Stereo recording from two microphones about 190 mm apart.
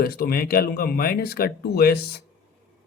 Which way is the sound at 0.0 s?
55° left (ahead or behind).